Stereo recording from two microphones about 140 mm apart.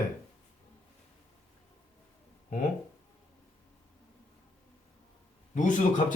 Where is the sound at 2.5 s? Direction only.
70° left (ahead or behind).